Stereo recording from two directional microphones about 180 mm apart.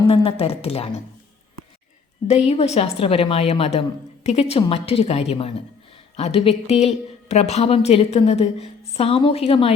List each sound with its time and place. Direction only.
0.1 s a woman's voice: 30° left (ahead or behind)
2.5 s a woman's voice: 35° left (ahead or behind)